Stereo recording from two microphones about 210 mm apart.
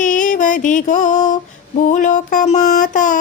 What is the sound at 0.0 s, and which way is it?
Music, 40° left (ahead or behind).